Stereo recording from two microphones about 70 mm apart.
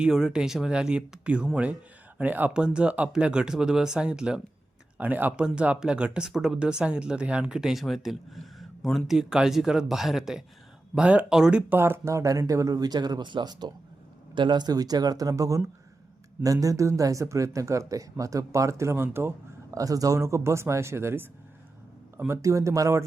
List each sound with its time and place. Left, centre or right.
0.0 s speech: centre; by 2.5 s right
2.5 s speech: centre
10.9 s speech: centre
11.3 s speech: centre
12.0 s speech: right
14.5 s speech: right
19.7 s speech: right
22.3 s speech: right